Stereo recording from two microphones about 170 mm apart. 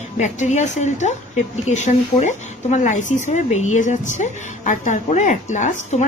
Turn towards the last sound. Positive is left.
turn(degrees=45)  # may be behind; listen again after turning